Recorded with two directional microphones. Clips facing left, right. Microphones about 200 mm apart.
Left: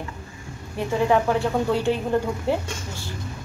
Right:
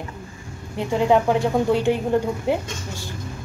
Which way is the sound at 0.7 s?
20° right (ahead or behind).